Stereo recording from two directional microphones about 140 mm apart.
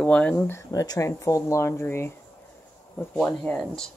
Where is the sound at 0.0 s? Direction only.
10° left (ahead or behind).